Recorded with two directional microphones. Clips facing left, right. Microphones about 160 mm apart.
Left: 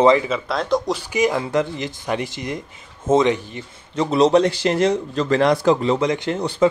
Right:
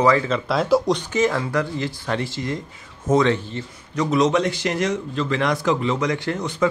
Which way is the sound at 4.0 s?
30° left (ahead or behind).